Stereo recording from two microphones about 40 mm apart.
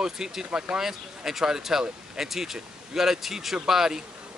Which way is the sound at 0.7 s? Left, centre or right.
Centre.